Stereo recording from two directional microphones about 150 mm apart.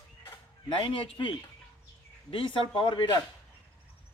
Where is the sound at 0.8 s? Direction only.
35° left (ahead or behind).